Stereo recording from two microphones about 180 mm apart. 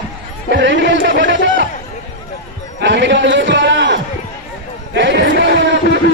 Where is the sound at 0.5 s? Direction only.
75° right (ahead or behind).